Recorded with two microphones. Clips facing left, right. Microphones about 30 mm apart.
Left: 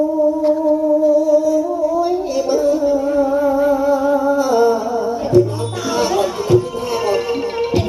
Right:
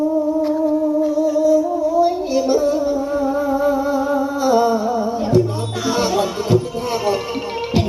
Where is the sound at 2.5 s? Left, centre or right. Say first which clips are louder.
Left 1 dB; centre.